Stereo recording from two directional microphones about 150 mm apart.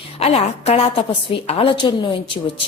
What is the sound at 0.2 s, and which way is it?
A woman's voice, 45° left (ahead or behind).